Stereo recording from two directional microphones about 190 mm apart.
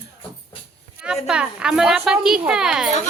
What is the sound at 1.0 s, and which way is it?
Speech, 5° right (ahead or behind).